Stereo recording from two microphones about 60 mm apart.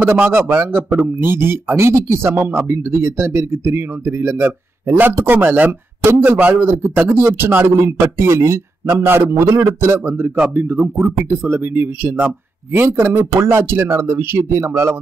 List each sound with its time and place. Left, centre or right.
0.0 s a man's voice: right